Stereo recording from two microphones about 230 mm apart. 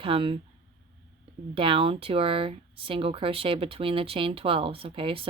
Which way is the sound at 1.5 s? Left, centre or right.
Right.